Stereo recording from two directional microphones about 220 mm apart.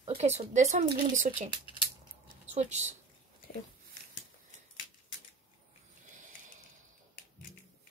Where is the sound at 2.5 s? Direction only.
30° right (ahead or behind).